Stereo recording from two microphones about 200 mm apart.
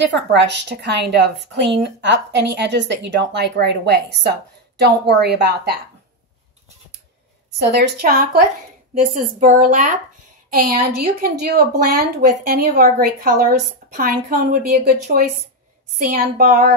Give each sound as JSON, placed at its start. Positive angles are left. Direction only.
{"t": 0.1, "sound": "a woman's voice", "side_deg": -60}
{"t": 7.6, "sound": "a woman's voice", "side_deg": -50}